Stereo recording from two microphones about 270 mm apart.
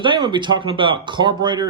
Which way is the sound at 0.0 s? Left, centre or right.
Centre.